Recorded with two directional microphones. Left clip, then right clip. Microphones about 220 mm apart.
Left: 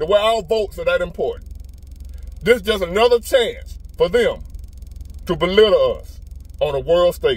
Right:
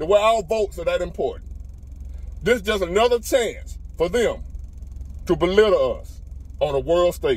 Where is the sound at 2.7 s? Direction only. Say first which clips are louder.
Left 3 dB; 20° left (ahead or behind).